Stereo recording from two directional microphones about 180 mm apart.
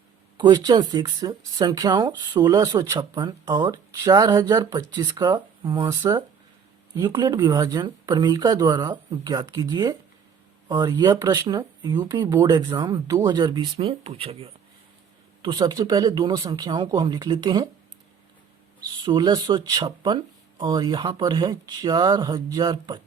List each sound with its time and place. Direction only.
0.3 s speech: 20° right (ahead or behind)
19.0 s speech: 25° right (ahead or behind)